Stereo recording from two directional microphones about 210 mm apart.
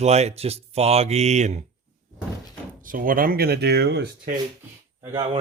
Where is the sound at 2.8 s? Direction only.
40° right (ahead or behind).